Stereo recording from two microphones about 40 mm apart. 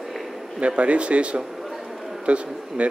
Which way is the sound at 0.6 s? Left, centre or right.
Right.